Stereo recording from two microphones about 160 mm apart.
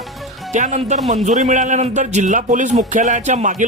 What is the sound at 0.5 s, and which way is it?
Speech, 50° right (ahead or behind).